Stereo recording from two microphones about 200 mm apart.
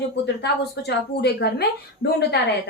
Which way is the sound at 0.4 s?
55° left (ahead or behind).